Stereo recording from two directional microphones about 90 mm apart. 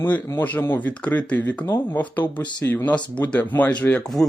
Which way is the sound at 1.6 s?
25° left (ahead or behind).